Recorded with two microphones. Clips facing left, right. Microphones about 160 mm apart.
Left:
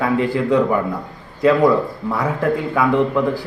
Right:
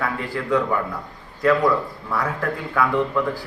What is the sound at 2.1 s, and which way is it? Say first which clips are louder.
Speech: left 5 dB; 20° left (ahead or behind).